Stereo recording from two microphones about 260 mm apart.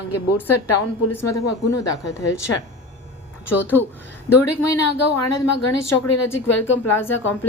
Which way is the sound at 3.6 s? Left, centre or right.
Centre.